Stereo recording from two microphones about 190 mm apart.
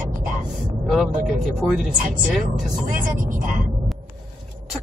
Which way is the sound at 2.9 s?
45° right (ahead or behind).